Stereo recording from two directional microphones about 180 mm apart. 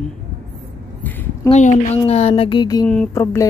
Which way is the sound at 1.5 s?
40° left (ahead or behind).